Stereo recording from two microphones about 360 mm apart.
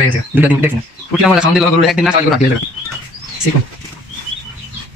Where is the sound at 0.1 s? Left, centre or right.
Centre.